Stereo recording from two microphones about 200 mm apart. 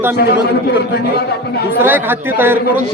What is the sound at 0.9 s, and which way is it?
Speech, 50° left (ahead or behind).